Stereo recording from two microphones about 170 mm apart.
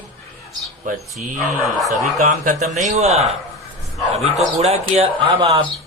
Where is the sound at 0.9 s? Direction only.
50° right (ahead or behind).